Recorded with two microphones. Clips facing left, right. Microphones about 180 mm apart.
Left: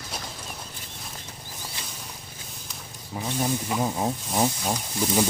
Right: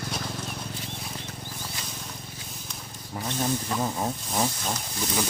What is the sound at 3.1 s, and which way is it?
Speech, 10° left (ahead or behind).